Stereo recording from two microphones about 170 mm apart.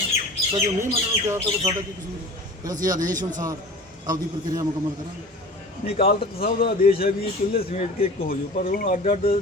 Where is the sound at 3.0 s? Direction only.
50° right (ahead or behind).